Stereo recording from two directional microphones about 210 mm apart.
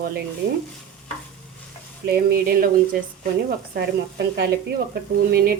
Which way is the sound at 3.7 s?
50° right (ahead or behind).